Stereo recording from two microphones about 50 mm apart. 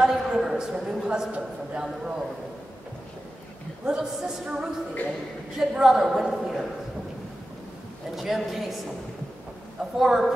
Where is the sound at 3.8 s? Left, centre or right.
Centre.